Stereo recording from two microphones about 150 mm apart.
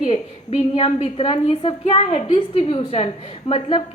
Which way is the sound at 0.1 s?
40° left (ahead or behind).